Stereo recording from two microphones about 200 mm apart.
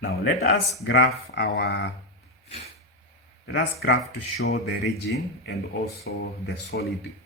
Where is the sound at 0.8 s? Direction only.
70° left (ahead or behind).